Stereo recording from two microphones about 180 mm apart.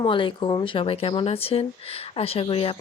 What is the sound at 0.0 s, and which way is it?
Speech, 25° left (ahead or behind).